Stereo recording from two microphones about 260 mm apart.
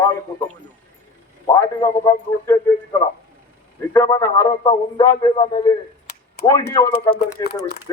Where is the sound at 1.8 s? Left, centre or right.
Centre.